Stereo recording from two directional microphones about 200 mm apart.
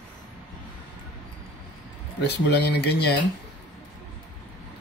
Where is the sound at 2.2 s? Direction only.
55° left (ahead or behind).